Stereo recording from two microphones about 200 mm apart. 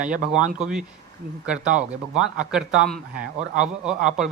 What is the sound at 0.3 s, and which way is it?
Speech, 5° right (ahead or behind).